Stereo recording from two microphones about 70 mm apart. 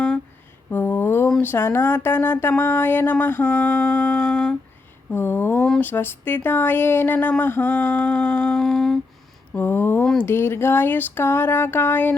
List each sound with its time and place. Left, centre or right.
0.7 s a sound: left
1.4 s speech: left
4.3 s a sound: centre
5.1 s speech: left
5.5 s speech: centre
5.8 s speech: left; by 9.0 s centre
9.6 s speech: left